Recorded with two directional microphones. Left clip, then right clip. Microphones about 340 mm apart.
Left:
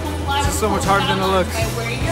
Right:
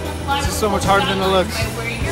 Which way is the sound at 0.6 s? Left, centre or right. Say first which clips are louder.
Right 3 dB; centre.